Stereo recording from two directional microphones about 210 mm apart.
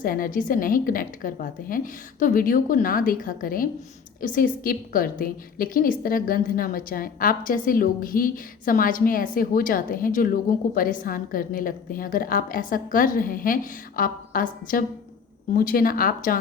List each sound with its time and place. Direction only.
0.0 s a woman's voice: 40° left (ahead or behind)